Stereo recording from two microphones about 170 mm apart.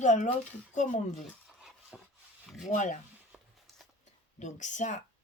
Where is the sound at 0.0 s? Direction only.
45° left (ahead or behind).